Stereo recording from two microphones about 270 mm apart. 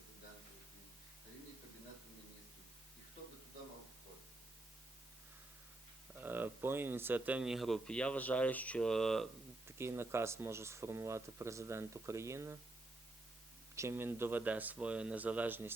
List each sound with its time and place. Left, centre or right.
6.1 s speech: centre
9.6 s speech: centre
13.7 s speech: centre